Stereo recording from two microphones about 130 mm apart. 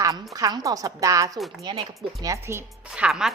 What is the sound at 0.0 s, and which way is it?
A woman's voice, 25° right (ahead or behind).